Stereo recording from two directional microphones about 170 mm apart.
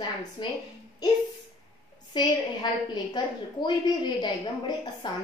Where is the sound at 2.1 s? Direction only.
25° left (ahead or behind).